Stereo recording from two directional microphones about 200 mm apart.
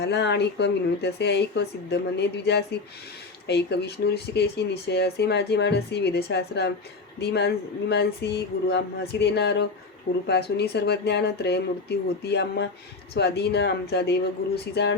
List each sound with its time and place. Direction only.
0.0 s speech: 55° left (ahead or behind)